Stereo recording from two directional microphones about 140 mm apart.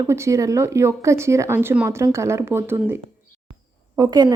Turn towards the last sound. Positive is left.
turn(degrees=-30)  # may be behind; listen again after turning